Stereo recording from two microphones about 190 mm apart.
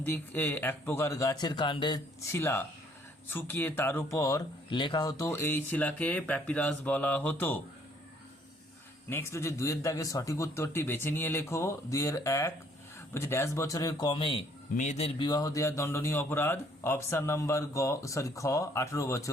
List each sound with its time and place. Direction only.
0.0 s speech: 10° left (ahead or behind)
2.3 s speech: 15° left (ahead or behind)
9.0 s a man's voice: 15° left (ahead or behind); by 15.3 s 30° left (ahead or behind)
15.3 s speech: 20° left (ahead or behind)